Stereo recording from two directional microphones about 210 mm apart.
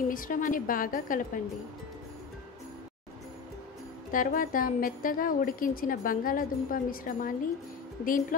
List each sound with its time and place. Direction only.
0.1 s a woman's voice: 40° left (ahead or behind)
4.1 s a woman's voice: 40° left (ahead or behind)